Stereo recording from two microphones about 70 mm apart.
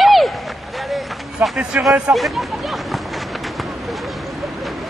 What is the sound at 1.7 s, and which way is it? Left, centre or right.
Speech, centre.